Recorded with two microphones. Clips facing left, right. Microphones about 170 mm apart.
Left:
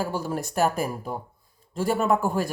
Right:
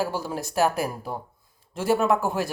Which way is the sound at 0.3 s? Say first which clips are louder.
Even; 5° right (ahead or behind).